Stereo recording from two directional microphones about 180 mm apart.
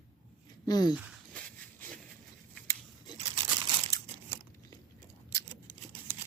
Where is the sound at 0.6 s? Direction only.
20° left (ahead or behind).